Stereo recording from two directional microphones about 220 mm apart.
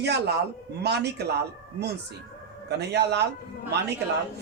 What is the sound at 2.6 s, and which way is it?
Speech, 50° right (ahead or behind).